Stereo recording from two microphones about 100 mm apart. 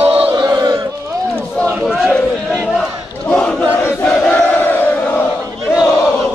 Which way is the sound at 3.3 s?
10° left (ahead or behind).